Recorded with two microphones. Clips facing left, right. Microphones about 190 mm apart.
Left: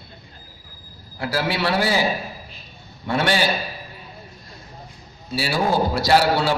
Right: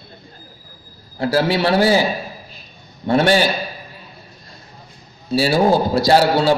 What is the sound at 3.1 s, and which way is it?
Speech, 40° right (ahead or behind).